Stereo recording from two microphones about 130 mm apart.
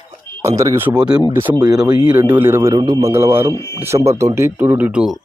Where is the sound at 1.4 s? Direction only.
35° right (ahead or behind).